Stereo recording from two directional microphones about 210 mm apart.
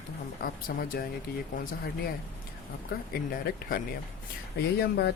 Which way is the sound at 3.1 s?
45° left (ahead or behind).